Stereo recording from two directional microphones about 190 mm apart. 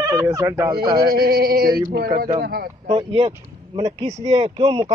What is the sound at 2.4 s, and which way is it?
Speech, 55° right (ahead or behind).